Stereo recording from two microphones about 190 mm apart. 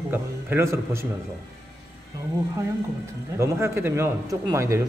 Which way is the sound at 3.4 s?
15° right (ahead or behind).